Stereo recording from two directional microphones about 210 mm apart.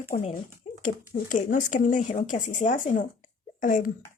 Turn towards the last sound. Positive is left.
turn(degrees=40)  # may be behind; listen again after turning